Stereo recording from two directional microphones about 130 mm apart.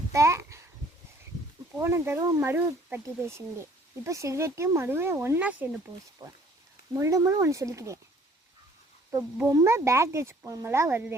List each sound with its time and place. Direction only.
0.1 s a sound: 20° right (ahead or behind)
1.8 s speech: 20° right (ahead or behind)
6.2 s speech: 35° right (ahead or behind)
6.9 s speech: 25° right (ahead or behind)
9.1 s speech: 25° right (ahead or behind)